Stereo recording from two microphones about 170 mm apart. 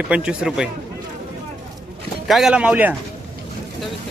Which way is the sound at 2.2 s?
Centre (ahead or behind).